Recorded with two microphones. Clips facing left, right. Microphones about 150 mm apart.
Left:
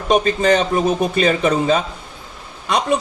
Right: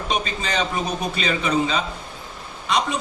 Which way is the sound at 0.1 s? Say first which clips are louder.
Left 12 dB; 50° left (ahead or behind).